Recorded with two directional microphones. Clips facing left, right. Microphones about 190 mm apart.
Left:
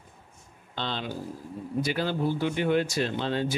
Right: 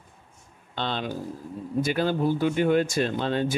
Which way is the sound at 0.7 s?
50° right (ahead or behind).